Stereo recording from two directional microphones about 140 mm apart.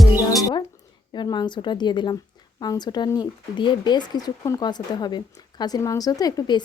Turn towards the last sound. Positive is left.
turn(degrees=25)  # may be behind; listen again after turning